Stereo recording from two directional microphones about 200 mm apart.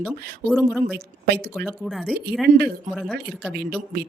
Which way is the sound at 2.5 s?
40° right (ahead or behind).